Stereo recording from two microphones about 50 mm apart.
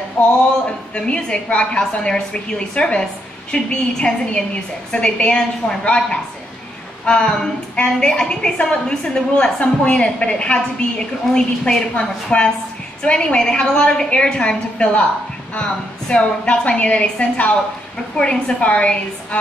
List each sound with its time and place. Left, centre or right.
0.9 s a woman's voice: left